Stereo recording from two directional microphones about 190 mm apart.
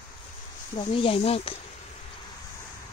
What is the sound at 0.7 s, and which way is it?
Speech, 30° left (ahead or behind).